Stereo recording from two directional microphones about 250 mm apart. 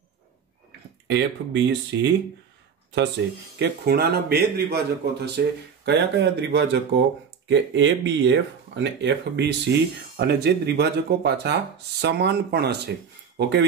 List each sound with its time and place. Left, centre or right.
0.7 s speech: right